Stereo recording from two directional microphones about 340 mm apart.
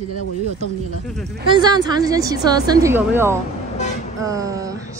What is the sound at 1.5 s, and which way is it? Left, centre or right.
Speech, centre.